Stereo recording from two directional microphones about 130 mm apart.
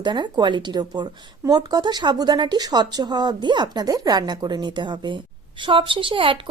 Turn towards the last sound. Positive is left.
turn(degrees=-40)  # may be behind; listen again after turning